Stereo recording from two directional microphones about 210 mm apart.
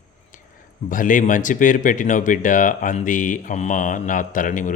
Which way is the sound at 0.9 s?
40° left (ahead or behind).